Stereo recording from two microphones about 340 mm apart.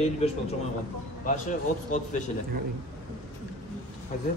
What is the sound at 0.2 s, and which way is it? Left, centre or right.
Speech, centre.